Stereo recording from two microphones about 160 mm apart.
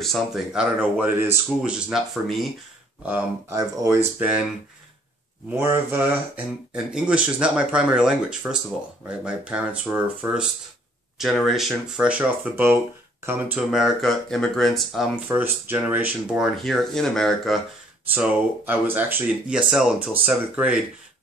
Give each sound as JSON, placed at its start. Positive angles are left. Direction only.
{"t": 0.0, "sound": "speech", "side_deg": 0}
{"t": 3.1, "sound": "speech", "side_deg": -15}
{"t": 5.5, "sound": "speech", "side_deg": -15}
{"t": 11.1, "sound": "speech", "side_deg": 0}
{"t": 15.2, "sound": "speech", "side_deg": -15}
{"t": 16.6, "sound": "speech", "side_deg": 0}
{"t": 18.1, "sound": "speech", "side_deg": -10}